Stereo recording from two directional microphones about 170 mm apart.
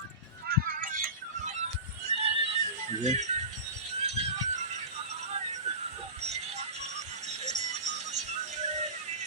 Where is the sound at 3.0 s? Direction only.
45° right (ahead or behind).